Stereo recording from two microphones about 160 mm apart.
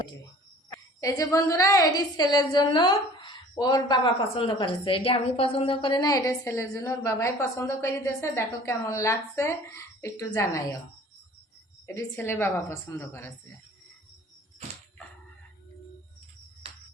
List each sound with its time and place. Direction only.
0.7 s a woman's voice: 20° left (ahead or behind)
12.1 s a woman's voice: 15° left (ahead or behind)